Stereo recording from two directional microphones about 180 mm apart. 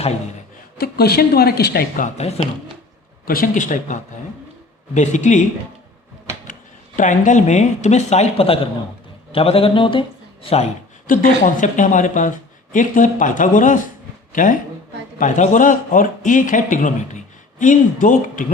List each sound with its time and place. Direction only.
0.8 s a woman's voice: 60° left (ahead or behind)
3.2 s a man's voice: 50° left (ahead or behind)
6.5 s speech: 45° left (ahead or behind)
11.0 s a man's voice: 50° left (ahead or behind)
15.2 s a man's voice: 45° left (ahead or behind)